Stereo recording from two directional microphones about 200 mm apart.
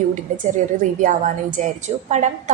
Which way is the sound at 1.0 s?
40° right (ahead or behind).